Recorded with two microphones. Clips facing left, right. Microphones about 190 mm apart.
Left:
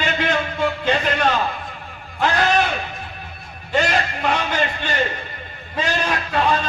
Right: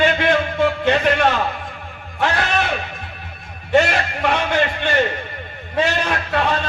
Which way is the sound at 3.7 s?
60° right (ahead or behind).